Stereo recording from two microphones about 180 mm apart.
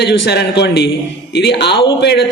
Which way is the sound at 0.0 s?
65° left (ahead or behind).